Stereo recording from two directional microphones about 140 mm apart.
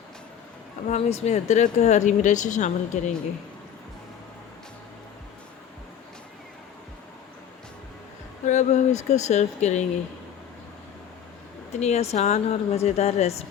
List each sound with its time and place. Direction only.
0.9 s speech: 50° left (ahead or behind)
8.4 s speech: 55° left (ahead or behind)
11.7 s speech: 55° left (ahead or behind)